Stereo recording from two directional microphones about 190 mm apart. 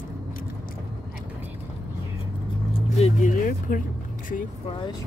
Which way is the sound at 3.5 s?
45° left (ahead or behind).